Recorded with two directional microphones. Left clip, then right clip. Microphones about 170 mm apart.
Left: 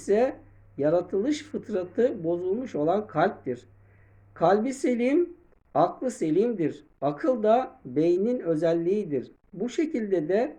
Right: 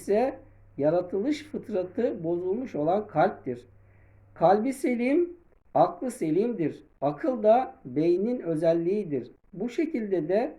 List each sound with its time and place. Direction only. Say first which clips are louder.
0.0 s speech: left 2 dB; 15° right (ahead or behind)